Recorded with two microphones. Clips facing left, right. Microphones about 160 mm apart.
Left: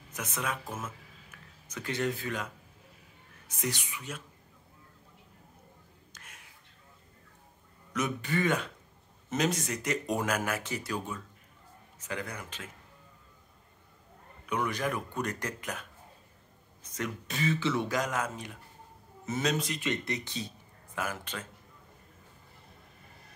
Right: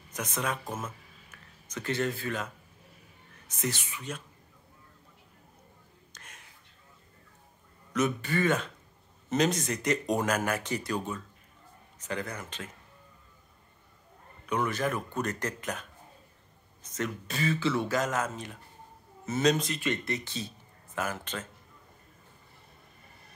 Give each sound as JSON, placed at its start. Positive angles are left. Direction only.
{"t": 0.7, "sound": "speech", "side_deg": -10}
{"t": 1.7, "sound": "speech", "side_deg": 10}
{"t": 3.4, "sound": "speech", "side_deg": 10}
{"t": 6.1, "sound": "a sound", "side_deg": 10}
{"t": 7.9, "sound": "speech", "side_deg": 15}
{"t": 14.5, "sound": "speech", "side_deg": 10}
{"t": 16.8, "sound": "speech", "side_deg": 10}